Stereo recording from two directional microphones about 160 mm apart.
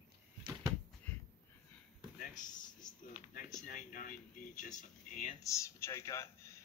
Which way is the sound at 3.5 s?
55° left (ahead or behind).